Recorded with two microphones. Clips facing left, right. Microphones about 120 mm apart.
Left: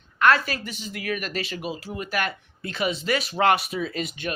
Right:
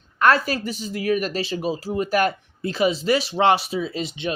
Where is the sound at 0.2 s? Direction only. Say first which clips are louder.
Right 2 dB; 40° right (ahead or behind).